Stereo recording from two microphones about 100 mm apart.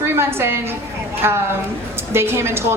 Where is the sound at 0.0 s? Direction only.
25° right (ahead or behind).